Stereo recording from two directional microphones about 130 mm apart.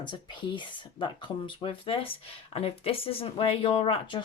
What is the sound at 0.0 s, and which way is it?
Speech, 35° left (ahead or behind).